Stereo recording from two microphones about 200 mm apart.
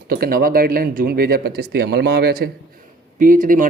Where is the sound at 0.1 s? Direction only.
45° right (ahead or behind).